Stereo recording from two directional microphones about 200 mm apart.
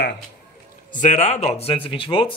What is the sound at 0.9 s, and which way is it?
Speech, 35° left (ahead or behind).